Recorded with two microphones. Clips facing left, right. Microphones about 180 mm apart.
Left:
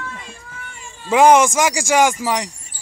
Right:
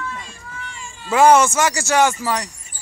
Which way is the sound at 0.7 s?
55° left (ahead or behind).